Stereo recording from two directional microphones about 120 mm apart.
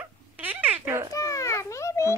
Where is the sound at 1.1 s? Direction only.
25° left (ahead or behind).